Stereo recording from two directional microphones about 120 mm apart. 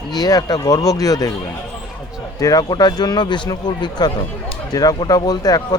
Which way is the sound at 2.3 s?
30° left (ahead or behind).